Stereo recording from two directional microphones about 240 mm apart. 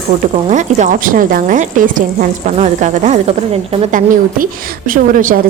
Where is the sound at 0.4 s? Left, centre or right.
Right.